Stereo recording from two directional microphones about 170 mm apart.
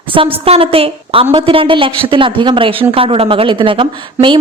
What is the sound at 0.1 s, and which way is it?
A woman's voice, 30° right (ahead or behind).